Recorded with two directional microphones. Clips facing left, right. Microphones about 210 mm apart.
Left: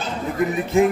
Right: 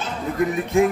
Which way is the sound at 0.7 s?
Centre (ahead or behind).